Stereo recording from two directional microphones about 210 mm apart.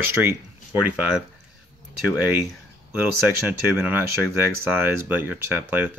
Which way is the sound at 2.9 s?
5° right (ahead or behind).